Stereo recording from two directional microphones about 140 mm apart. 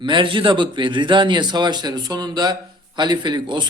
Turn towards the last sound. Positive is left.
turn(degrees=-35)  # may be behind; listen again after turning